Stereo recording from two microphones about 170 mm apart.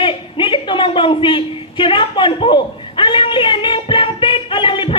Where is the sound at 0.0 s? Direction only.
30° left (ahead or behind).